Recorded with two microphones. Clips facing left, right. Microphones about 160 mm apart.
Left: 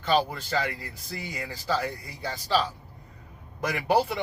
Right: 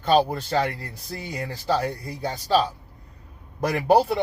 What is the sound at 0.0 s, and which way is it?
Speech, 50° right (ahead or behind).